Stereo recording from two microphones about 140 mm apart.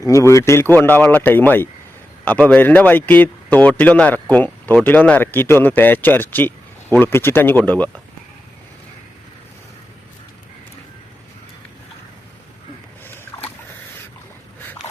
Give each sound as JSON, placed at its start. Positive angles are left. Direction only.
{"t": 0.0, "sound": "a man's voice", "side_deg": 20}